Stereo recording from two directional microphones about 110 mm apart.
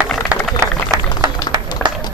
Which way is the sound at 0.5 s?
35° right (ahead or behind).